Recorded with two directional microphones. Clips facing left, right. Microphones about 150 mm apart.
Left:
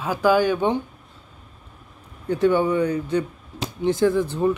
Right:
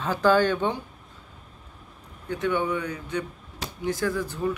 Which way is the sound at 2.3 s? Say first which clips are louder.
Left 7 dB; 35° left (ahead or behind).